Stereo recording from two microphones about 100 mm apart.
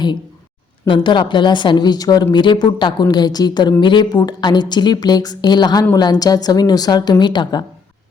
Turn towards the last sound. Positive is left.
turn(degrees=45)  # may be behind; listen again after turning